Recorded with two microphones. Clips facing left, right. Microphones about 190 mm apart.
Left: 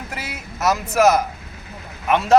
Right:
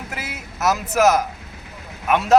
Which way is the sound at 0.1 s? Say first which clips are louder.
Even; centre (ahead or behind).